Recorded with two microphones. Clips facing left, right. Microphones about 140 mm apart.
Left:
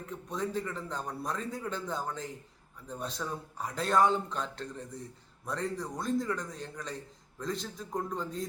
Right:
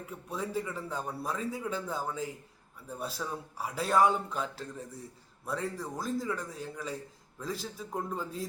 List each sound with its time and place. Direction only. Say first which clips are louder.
0.0 s a man's voice: left 2 dB; 5° right (ahead or behind)